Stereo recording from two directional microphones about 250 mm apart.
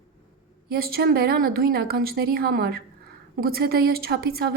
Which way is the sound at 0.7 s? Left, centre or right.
Right.